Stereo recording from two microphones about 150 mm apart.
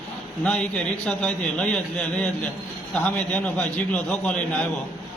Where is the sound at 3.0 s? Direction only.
10° left (ahead or behind).